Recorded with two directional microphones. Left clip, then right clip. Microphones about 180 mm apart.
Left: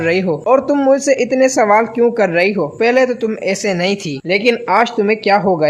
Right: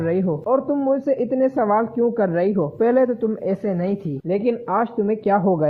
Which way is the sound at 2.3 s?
15° left (ahead or behind).